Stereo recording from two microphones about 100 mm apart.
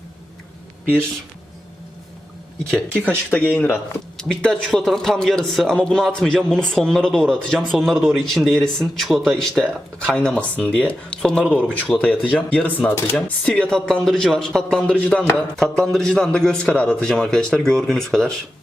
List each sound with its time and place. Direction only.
2.6 s a man's voice: 5° left (ahead or behind)
3.2 s speech: 20° left (ahead or behind)
4.2 s a man's voice: 5° left (ahead or behind)